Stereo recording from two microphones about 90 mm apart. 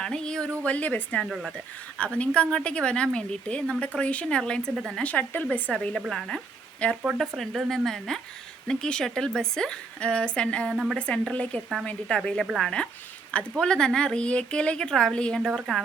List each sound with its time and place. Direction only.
0.0 s speech: 10° left (ahead or behind)
5.0 s speech: 20° left (ahead or behind)
5.7 s speech: 5° left (ahead or behind)
10.7 s speech: centre (ahead or behind)
10.9 s speech: 10° left (ahead or behind)
15.4 s speech: centre (ahead or behind)